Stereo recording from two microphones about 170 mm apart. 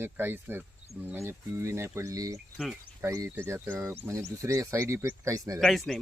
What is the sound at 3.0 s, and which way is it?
Speech, 15° right (ahead or behind).